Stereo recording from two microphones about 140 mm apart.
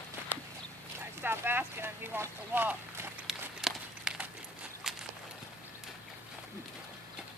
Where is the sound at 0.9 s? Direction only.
15° right (ahead or behind).